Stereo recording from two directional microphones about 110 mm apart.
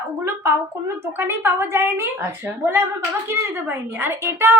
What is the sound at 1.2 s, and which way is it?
Speech, 20° right (ahead or behind).